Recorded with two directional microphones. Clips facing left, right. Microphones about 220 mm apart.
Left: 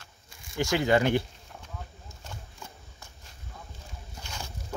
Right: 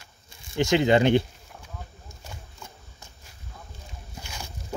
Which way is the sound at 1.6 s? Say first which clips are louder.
Right 1 dB; 10° right (ahead or behind).